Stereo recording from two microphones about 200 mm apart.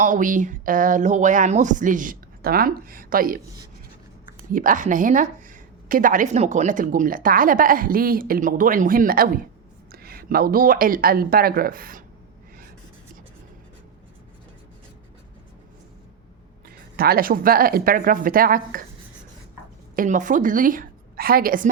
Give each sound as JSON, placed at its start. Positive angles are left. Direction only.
{"t": 0.0, "sound": "speech", "side_deg": -40}
{"t": 16.6, "sound": "speech", "side_deg": -50}
{"t": 20.0, "sound": "a woman's voice", "side_deg": -40}